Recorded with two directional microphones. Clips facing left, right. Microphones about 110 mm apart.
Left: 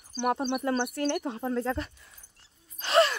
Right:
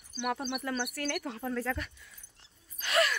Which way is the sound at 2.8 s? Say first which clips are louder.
Left 6 dB; 30° left (ahead or behind).